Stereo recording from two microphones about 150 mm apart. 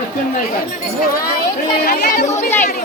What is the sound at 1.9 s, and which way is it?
Speech, 55° left (ahead or behind).